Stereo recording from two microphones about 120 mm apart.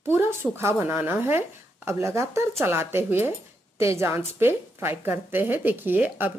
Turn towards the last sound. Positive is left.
turn(degrees=-15)  # may be behind; listen again after turning